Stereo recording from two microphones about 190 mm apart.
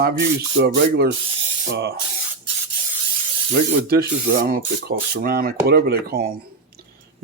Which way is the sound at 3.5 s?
55° right (ahead or behind).